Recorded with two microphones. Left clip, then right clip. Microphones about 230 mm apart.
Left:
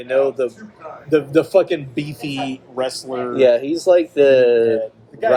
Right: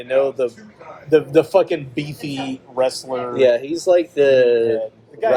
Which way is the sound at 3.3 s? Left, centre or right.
Left.